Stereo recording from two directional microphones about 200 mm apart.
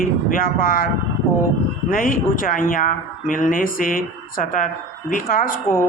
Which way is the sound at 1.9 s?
45° left (ahead or behind).